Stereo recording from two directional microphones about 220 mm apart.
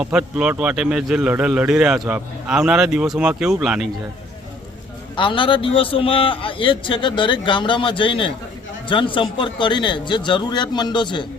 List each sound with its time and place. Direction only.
0.0 s a man's voice: 5° right (ahead or behind)
5.1 s a man's voice: 20° left (ahead or behind)